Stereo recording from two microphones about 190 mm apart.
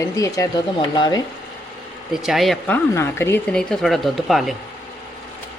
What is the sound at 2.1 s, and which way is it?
Speech, centre (ahead or behind).